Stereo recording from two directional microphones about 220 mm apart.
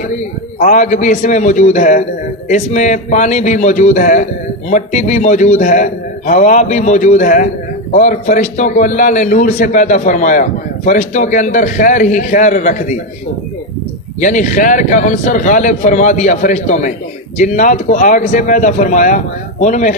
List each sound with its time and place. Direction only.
0.6 s a man's voice: 35° left (ahead or behind)
14.2 s a man's voice: 35° left (ahead or behind)